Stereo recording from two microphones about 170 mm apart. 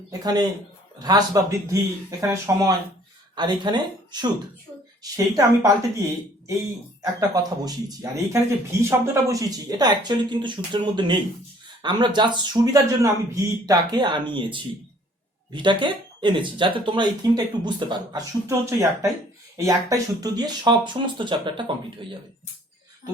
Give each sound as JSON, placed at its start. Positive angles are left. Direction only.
{"t": 0.1, "sound": "a woman's voice", "side_deg": -20}
{"t": 7.0, "sound": "speech", "side_deg": -20}